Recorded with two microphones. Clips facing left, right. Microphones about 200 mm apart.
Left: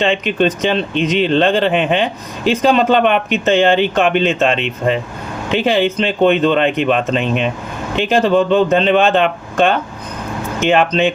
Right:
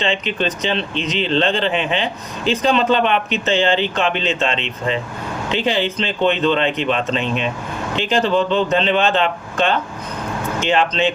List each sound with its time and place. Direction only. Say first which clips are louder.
0.0 s speech: left 6 dB; 50° left (ahead or behind)